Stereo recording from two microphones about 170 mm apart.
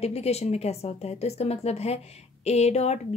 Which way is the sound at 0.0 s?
40° left (ahead or behind).